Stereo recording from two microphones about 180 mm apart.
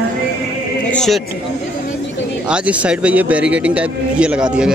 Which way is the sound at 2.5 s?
5° right (ahead or behind).